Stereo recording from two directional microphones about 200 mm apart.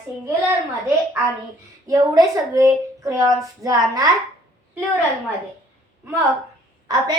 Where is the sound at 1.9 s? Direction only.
15° right (ahead or behind).